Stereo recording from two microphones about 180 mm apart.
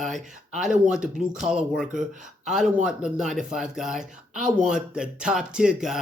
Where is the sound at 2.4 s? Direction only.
Centre (ahead or behind).